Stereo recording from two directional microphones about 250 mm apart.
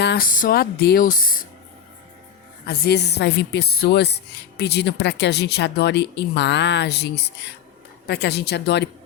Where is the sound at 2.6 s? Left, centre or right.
Left.